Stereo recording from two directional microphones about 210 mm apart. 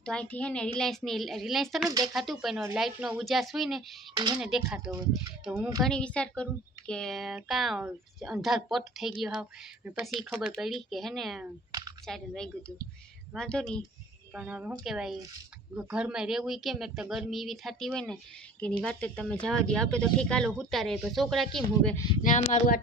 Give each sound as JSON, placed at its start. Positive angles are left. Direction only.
{"t": 0.0, "sound": "speech", "side_deg": 5}
{"t": 4.1, "sound": "speech", "side_deg": -20}
{"t": 4.4, "sound": "speech", "side_deg": 0}
{"t": 4.6, "sound": "speech", "side_deg": -15}
{"t": 5.8, "sound": "speech", "side_deg": 5}
{"t": 22.2, "sound": "speech", "side_deg": 40}